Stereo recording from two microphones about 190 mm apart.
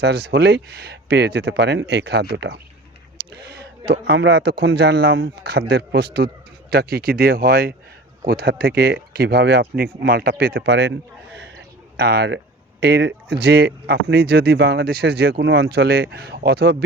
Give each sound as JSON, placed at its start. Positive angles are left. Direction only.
{"t": 0.0, "sound": "speech", "side_deg": -60}
{"t": 3.2, "sound": "a sound", "side_deg": -60}
{"t": 4.0, "sound": "speech", "side_deg": -65}
{"t": 11.9, "sound": "speech", "side_deg": -60}